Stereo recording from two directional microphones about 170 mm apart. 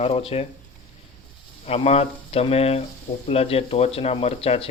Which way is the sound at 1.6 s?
35° left (ahead or behind).